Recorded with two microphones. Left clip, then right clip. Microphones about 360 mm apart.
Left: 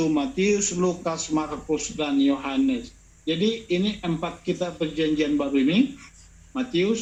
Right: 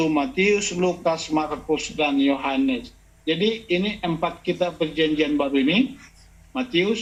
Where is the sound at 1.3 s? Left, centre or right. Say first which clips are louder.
Right 3 dB; right.